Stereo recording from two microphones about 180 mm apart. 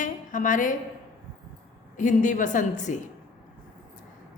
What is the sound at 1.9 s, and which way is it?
A woman's voice, 45° left (ahead or behind).